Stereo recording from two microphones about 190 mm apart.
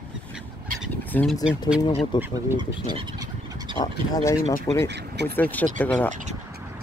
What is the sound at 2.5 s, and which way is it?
Speech, 25° right (ahead or behind).